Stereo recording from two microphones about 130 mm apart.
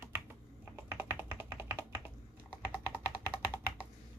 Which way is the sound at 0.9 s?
15° right (ahead or behind).